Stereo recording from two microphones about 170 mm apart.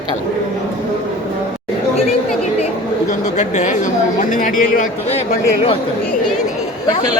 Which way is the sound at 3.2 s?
45° left (ahead or behind).